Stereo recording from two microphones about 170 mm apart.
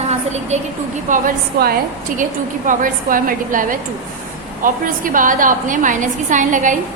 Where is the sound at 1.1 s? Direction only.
60° right (ahead or behind).